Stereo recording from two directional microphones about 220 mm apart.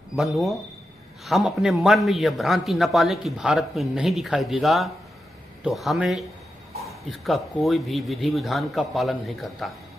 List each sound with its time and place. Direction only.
0.1 s a man's voice: centre (ahead or behind)